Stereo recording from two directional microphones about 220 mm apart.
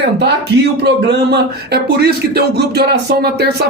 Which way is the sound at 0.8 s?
50° right (ahead or behind).